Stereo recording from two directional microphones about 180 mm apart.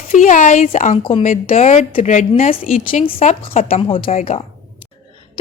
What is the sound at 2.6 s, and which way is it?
Speech, 50° left (ahead or behind).